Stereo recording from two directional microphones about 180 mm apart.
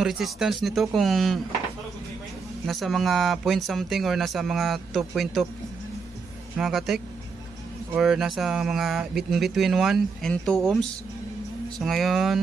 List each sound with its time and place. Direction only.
0.0 s speech: centre (ahead or behind)
2.6 s speech: centre (ahead or behind)
6.5 s speech: centre (ahead or behind)